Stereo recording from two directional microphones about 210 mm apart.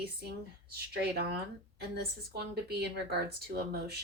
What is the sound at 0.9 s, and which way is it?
Speech, 50° right (ahead or behind).